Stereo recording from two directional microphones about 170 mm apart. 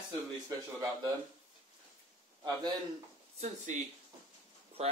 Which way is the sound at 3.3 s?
45° right (ahead or behind).